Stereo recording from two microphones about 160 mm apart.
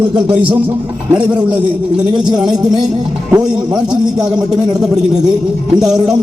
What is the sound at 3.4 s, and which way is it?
Speech, 5° right (ahead or behind).